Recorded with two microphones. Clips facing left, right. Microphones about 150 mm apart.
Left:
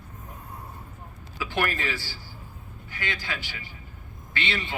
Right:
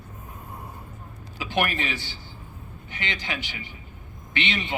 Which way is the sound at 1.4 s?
20° right (ahead or behind).